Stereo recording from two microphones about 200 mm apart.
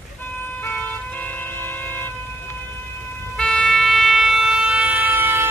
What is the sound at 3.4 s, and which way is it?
Train, 5° left (ahead or behind).